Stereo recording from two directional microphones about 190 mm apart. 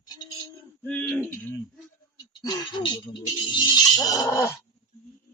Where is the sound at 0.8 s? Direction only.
10° left (ahead or behind).